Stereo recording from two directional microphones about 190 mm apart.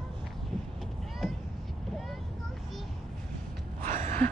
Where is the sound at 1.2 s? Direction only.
5° left (ahead or behind).